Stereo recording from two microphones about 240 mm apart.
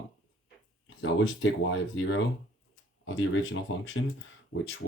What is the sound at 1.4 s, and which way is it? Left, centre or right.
Speech, left.